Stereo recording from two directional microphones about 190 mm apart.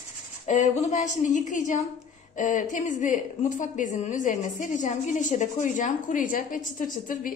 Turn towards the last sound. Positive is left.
turn(degrees=45)  # may be behind; listen again after turning